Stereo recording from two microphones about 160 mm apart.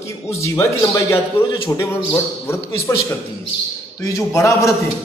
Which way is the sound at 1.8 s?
15° left (ahead or behind).